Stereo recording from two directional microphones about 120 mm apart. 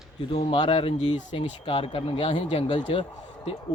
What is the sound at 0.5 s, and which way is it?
A man's voice, 50° left (ahead or behind).